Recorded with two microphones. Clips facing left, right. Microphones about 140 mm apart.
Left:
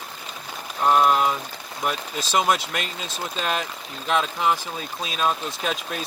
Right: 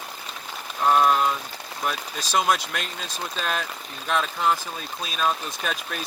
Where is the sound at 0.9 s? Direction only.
10° left (ahead or behind).